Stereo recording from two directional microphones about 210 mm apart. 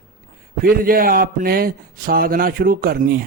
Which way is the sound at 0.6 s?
45° right (ahead or behind).